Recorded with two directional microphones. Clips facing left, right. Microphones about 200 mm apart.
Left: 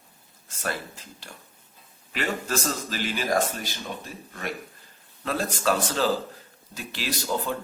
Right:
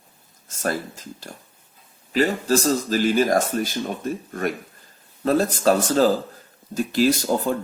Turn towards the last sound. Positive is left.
turn(degrees=-45)  # may be behind; listen again after turning